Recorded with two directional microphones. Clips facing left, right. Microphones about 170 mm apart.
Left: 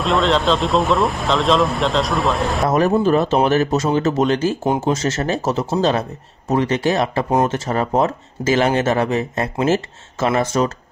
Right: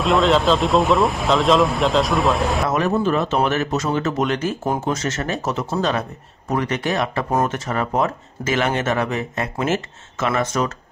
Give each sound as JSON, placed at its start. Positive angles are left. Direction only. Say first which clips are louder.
{"t": 0.0, "sound": "speech", "louder": "right 1 dB", "side_deg": 0}
{"t": 2.7, "sound": "speech", "louder": "left 7 dB", "side_deg": 35}